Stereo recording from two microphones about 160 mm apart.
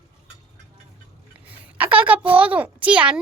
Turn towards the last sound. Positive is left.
turn(degrees=-5)  # may be behind; listen again after turning